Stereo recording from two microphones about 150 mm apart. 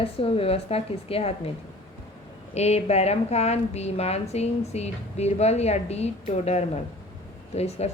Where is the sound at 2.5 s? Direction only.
45° left (ahead or behind).